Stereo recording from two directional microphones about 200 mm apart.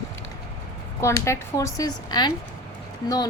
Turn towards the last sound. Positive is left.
turn(degrees=20)  # may be behind; listen again after turning